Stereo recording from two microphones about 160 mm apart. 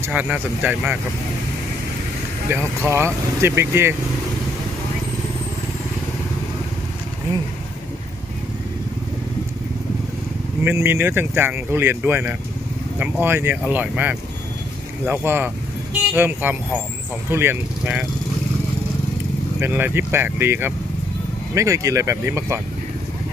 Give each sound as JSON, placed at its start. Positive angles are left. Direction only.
{"t": 0.0, "sound": "speech", "side_deg": -10}
{"t": 2.5, "sound": "speech", "side_deg": -15}
{"t": 10.6, "sound": "speech", "side_deg": -15}
{"t": 19.6, "sound": "speech", "side_deg": -15}